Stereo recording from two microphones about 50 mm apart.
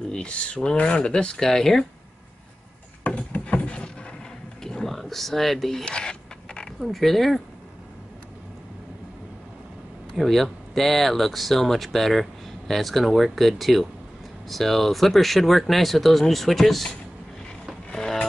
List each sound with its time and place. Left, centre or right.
0.1 s speech: left
3.1 s a sound: left
4.6 s speech: centre
5.9 s a sound: centre
6.8 s speech: centre
10.1 s speech: centre
17.9 s music: centre